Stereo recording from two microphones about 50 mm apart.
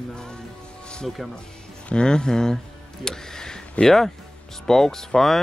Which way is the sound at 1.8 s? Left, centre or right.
Centre.